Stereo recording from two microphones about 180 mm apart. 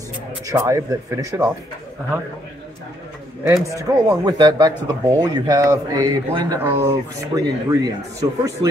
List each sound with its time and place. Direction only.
0.5 s speech: 15° right (ahead or behind)
3.6 s speech: 15° right (ahead or behind)